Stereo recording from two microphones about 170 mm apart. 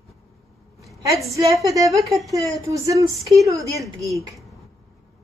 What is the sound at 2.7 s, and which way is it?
A woman's voice, 20° right (ahead or behind).